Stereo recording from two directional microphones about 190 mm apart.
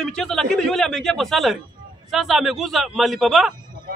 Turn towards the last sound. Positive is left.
turn(degrees=0)  # may be behind; listen again after turning